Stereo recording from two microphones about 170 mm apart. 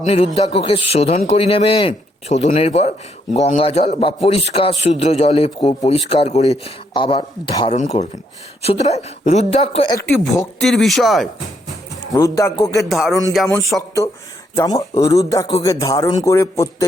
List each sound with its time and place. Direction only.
0.0 s a man's voice: 35° left (ahead or behind)
10.4 s speech: centre (ahead or behind)
12.1 s speech: 20° left (ahead or behind)
12.9 s speech: centre (ahead or behind)
14.5 s a man's voice: 20° left (ahead or behind)